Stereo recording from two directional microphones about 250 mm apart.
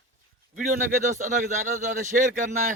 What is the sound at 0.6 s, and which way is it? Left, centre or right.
A man's voice, right.